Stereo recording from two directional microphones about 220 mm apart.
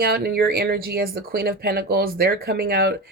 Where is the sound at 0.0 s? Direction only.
45° right (ahead or behind).